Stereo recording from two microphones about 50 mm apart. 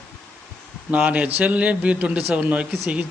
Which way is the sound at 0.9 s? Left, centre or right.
Right.